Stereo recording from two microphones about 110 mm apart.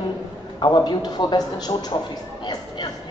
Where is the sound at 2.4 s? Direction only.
40° left (ahead or behind).